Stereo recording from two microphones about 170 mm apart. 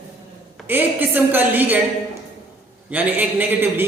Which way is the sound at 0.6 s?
10° right (ahead or behind).